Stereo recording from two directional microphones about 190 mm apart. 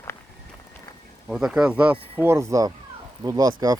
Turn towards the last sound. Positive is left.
turn(degrees=-20)  # may be behind; listen again after turning